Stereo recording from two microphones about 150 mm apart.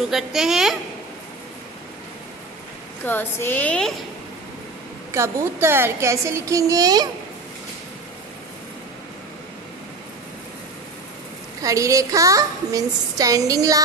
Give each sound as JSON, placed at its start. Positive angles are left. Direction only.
{"t": 0.1, "sound": "a woman's voice", "side_deg": 0}
{"t": 3.0, "sound": "a woman's voice", "side_deg": 15}
{"t": 5.1, "sound": "a woman's voice", "side_deg": -20}
{"t": 11.6, "sound": "a woman's voice", "side_deg": -20}